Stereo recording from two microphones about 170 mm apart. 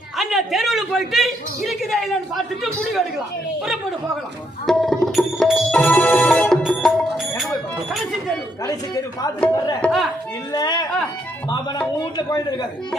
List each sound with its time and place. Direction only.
0.2 s a man's voice: centre (ahead or behind)
4.6 s music: centre (ahead or behind)
9.8 s a man's voice: centre (ahead or behind)
10.5 s speech: 25° left (ahead or behind)